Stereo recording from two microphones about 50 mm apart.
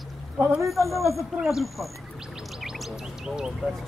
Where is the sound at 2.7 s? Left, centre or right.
Centre.